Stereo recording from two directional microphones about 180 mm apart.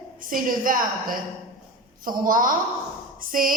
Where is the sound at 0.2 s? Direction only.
50° right (ahead or behind).